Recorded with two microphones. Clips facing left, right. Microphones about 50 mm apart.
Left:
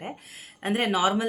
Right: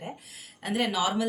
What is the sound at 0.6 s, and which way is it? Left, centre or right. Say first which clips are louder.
Speech: left 3 dB; left.